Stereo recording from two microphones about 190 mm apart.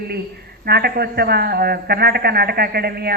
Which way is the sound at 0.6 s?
55° right (ahead or behind).